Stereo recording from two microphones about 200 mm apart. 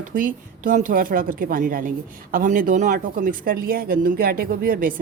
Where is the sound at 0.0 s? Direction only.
40° right (ahead or behind).